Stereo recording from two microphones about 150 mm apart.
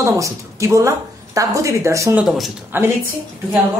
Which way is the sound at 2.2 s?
Centre (ahead or behind).